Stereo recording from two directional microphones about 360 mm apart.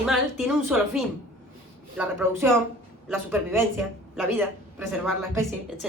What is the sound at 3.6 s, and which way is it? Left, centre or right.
A woman's voice, centre.